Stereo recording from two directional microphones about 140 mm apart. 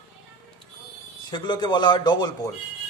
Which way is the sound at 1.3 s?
30° left (ahead or behind).